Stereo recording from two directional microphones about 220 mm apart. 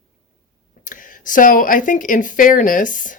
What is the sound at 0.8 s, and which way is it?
Speech, 35° left (ahead or behind).